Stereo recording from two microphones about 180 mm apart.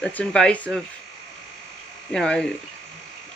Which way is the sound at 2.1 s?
5° left (ahead or behind).